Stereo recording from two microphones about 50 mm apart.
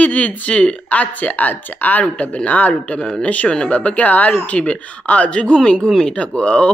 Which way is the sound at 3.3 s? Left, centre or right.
Left.